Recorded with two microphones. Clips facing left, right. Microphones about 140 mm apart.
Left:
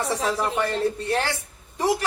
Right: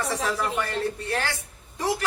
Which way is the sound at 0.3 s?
25° left (ahead or behind).